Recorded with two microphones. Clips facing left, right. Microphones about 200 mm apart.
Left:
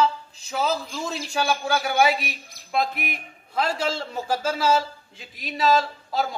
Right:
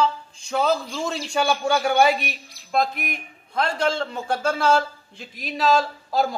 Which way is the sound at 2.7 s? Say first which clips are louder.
Right 2 dB; 50° right (ahead or behind).